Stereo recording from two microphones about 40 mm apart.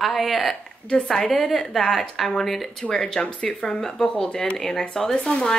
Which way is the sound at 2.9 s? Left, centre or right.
Centre.